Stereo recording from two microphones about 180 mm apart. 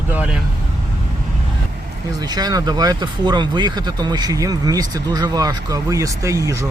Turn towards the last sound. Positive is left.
turn(degrees=-15)  # may be behind; listen again after turning